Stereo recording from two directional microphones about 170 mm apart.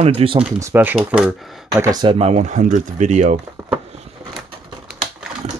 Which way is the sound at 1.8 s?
25° right (ahead or behind).